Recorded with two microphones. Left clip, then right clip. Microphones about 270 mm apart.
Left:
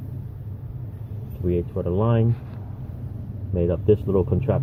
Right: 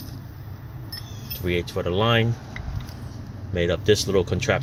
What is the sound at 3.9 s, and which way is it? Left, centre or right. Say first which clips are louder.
Speech: even; right.